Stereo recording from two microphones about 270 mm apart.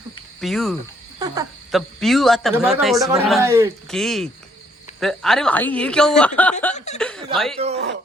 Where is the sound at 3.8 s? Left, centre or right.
Centre.